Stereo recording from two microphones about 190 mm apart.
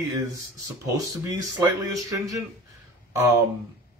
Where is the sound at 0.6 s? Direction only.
15° right (ahead or behind).